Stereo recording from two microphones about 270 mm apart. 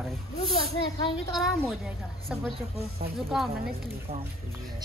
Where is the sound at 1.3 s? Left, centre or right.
Centre.